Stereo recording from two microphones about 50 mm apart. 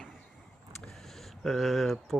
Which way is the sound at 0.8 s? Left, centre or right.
Centre.